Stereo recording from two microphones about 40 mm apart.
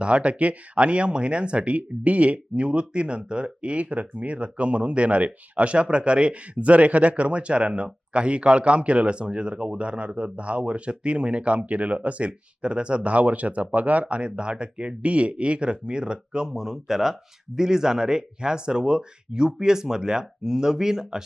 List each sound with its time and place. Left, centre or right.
0.0 s speech: right
16.5 s speech: centre